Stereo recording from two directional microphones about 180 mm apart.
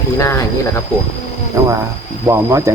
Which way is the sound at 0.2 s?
20° left (ahead or behind).